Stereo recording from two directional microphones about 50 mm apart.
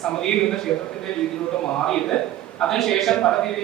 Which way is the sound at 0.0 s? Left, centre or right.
Centre.